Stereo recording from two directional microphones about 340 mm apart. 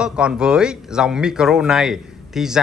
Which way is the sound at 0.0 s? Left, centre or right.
Centre.